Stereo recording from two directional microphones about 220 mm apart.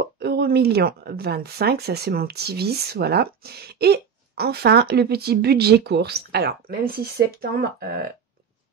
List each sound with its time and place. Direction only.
0.0 s speech: 45° right (ahead or behind)